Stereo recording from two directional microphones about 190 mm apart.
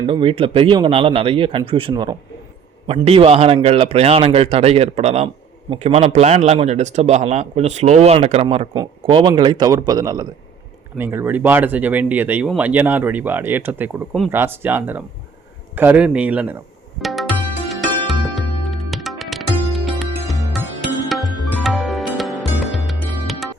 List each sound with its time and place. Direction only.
0.0 s a man's voice: 25° right (ahead or behind); by 16.6 s 5° right (ahead or behind)
17.0 s tabla: centre (ahead or behind)
17.7 s music: centre (ahead or behind)